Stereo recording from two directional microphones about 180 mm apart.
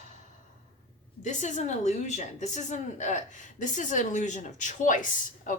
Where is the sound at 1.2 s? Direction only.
40° left (ahead or behind).